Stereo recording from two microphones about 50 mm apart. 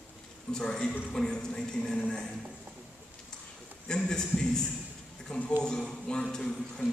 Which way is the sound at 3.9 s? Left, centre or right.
Centre.